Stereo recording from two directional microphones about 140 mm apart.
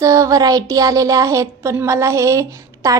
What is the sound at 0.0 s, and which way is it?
Speech, 25° right (ahead or behind).